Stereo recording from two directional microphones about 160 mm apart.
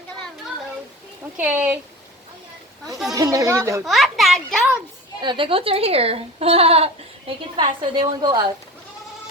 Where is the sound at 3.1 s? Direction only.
20° right (ahead or behind).